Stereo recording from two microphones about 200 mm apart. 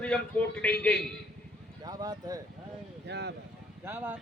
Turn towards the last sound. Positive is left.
turn(degrees=-10)  # may be behind; listen again after turning